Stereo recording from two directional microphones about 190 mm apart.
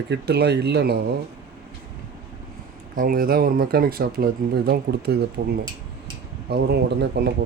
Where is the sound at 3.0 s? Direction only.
50° right (ahead or behind).